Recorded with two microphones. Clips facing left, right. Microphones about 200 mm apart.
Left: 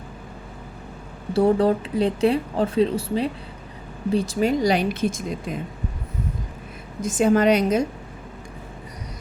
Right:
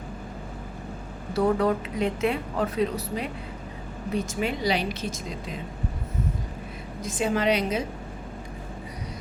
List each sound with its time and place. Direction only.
1.3 s speech: 30° left (ahead or behind); by 5.5 s 50° left (ahead or behind)
7.0 s speech: 45° left (ahead or behind)